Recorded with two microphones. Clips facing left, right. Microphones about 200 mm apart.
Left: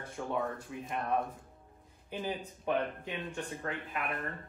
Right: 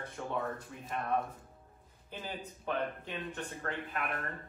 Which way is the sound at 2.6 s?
15° left (ahead or behind).